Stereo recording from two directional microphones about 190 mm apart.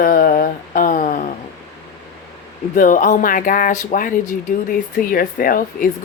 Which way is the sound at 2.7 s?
45° left (ahead or behind).